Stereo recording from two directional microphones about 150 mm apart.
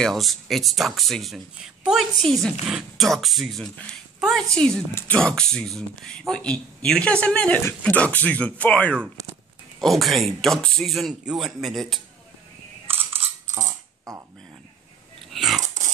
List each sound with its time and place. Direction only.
0.0 s speech: centre (ahead or behind)
13.6 s coin: 20° right (ahead or behind)
15.2 s a sound: centre (ahead or behind)
15.6 s dog: 55° right (ahead or behind)